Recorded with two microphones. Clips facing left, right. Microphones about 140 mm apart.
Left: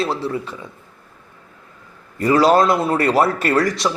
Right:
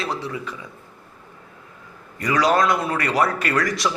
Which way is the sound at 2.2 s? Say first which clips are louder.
Left 5 dB; 30° left (ahead or behind).